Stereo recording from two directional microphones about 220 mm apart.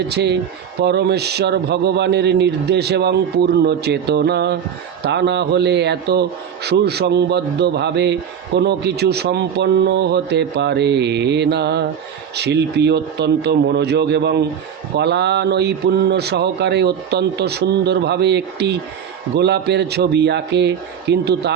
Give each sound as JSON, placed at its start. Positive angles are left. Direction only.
{"t": 0.1, "sound": "a man's voice", "side_deg": -50}